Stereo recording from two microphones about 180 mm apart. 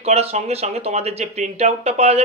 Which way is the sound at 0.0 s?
35° right (ahead or behind).